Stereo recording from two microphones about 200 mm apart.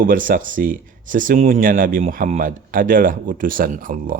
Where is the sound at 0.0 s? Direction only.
45° right (ahead or behind).